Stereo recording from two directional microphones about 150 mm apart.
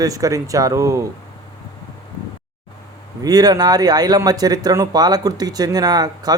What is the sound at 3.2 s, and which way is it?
Speech, 25° right (ahead or behind).